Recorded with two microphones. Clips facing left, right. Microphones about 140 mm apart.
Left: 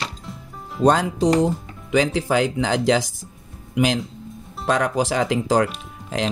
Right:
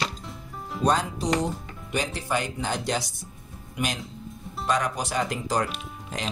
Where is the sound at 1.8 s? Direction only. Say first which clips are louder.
Left 10 dB; 90° left.